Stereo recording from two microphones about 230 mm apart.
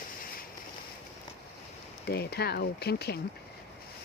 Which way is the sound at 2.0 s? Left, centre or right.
Left.